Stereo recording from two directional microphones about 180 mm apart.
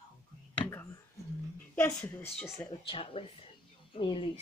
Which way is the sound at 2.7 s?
30° left (ahead or behind).